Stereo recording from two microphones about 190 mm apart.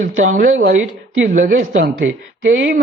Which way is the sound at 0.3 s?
45° right (ahead or behind).